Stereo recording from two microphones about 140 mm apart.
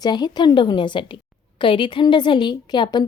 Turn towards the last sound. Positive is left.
turn(degrees=30)  # may be behind; listen again after turning